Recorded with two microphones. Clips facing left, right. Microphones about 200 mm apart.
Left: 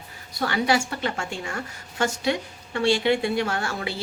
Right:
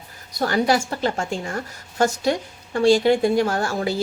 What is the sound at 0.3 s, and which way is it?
Speech, 40° right (ahead or behind).